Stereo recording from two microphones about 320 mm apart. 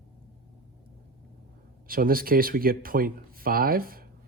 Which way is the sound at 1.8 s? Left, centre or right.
Right.